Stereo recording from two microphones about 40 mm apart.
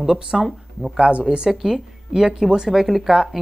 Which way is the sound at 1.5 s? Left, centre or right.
Centre.